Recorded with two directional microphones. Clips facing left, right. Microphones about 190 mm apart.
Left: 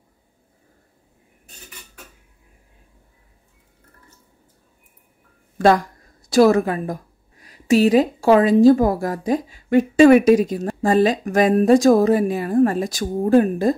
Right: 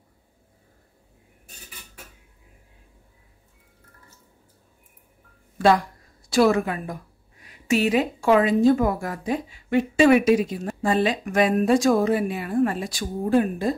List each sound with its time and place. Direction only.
5.6 s speech: 45° left (ahead or behind)